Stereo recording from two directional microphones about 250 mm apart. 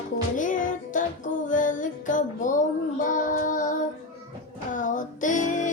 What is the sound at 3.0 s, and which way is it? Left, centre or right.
Child singing, left.